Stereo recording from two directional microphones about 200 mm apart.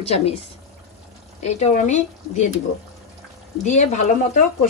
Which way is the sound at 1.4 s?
35° left (ahead or behind).